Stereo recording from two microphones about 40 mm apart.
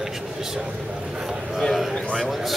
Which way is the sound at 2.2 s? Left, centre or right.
Centre.